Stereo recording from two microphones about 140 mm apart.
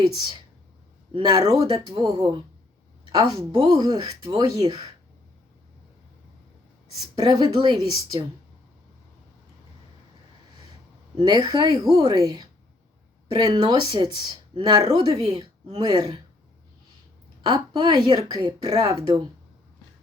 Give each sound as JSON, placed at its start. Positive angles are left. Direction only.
{"t": 1.1, "sound": "speech", "side_deg": -40}
{"t": 1.5, "sound": "speech", "side_deg": -25}
{"t": 7.2, "sound": "speech", "side_deg": -30}
{"t": 11.2, "sound": "speech", "side_deg": -30}
{"t": 17.4, "sound": "speech", "side_deg": -30}